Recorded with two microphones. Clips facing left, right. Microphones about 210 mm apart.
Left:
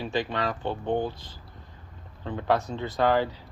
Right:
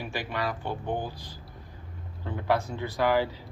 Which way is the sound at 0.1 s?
20° left (ahead or behind).